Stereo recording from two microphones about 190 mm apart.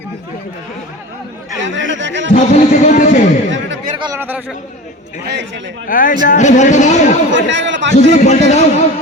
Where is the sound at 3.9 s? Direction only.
20° right (ahead or behind).